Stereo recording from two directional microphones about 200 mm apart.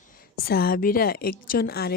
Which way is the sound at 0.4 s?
50° left (ahead or behind).